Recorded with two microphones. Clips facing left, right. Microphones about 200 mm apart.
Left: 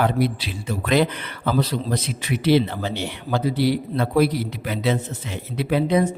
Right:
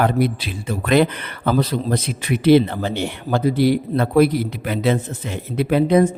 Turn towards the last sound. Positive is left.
turn(degrees=-55)  # may be behind; listen again after turning